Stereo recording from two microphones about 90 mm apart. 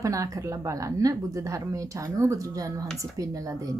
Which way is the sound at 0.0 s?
35° right (ahead or behind).